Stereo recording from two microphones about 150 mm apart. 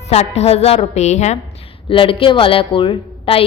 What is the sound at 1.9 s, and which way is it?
A woman's voice, 35° left (ahead or behind).